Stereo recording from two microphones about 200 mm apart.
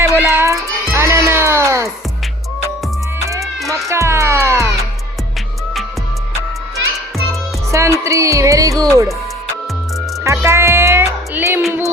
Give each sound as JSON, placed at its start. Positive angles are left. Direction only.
{"t": 0.0, "sound": "music", "side_deg": -10}
{"t": 3.7, "sound": "music", "side_deg": -15}
{"t": 7.7, "sound": "music", "side_deg": -15}
{"t": 10.2, "sound": "music", "side_deg": -15}